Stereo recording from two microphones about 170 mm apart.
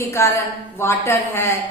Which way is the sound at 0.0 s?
15° left (ahead or behind).